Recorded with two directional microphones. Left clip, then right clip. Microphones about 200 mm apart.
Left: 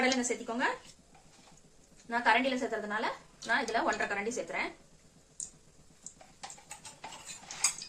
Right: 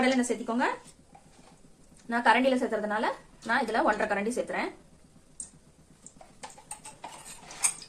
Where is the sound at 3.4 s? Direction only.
30° right (ahead or behind).